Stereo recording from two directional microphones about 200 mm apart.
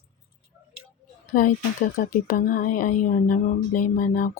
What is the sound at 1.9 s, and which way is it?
A woman's voice, 45° left (ahead or behind).